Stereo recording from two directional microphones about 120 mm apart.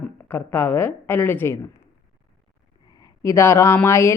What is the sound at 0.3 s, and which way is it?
A woman's voice, 15° left (ahead or behind).